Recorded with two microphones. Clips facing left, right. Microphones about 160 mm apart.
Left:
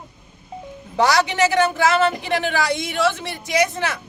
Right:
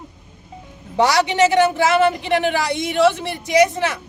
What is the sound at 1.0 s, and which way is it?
Speech, 30° right (ahead or behind).